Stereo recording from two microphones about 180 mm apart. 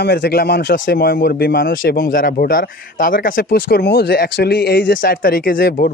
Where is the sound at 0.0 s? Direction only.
65° left (ahead or behind).